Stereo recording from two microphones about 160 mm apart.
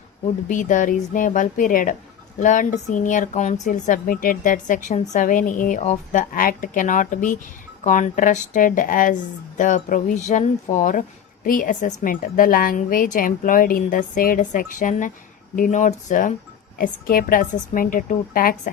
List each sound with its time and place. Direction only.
0.4 s a woman's voice: 55° left (ahead or behind)
16.7 s a woman's voice: 65° left (ahead or behind)